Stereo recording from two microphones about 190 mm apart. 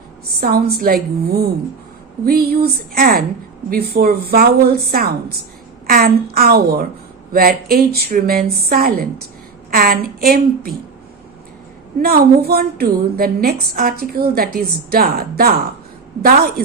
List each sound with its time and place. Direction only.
0.3 s a woman's voice: 50° right (ahead or behind)
12.0 s a woman's voice: 55° right (ahead or behind)